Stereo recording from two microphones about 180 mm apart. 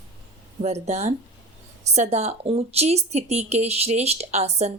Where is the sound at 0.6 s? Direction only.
40° right (ahead or behind).